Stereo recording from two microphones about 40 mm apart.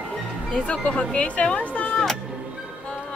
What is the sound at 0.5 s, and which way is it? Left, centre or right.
A woman's voice, left.